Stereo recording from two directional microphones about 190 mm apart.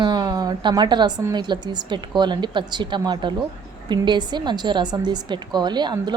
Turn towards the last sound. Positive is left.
turn(degrees=-20)  # may be behind; listen again after turning